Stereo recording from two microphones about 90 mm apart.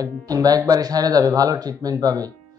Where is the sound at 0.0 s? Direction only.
45° right (ahead or behind).